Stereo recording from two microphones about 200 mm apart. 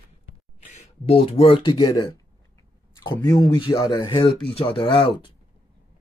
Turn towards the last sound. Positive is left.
turn(degrees=25)  # may be behind; listen again after turning